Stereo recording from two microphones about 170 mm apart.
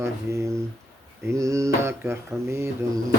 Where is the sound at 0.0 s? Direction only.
15° right (ahead or behind).